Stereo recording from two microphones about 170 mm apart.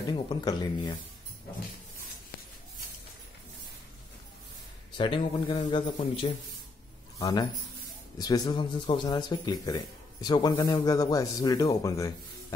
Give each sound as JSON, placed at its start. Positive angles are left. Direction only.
{"t": 0.3, "sound": "speech", "side_deg": 25}
{"t": 4.9, "sound": "speech", "side_deg": 30}